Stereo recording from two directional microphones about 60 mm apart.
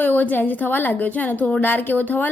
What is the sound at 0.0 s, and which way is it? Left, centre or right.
A woman's voice, left.